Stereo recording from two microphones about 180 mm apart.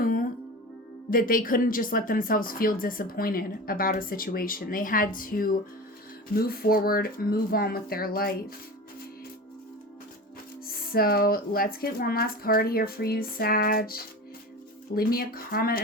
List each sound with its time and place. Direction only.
0.0 s music: 50° left (ahead or behind)
1.1 s speech: 50° left (ahead or behind)
10.9 s speech: 55° left (ahead or behind)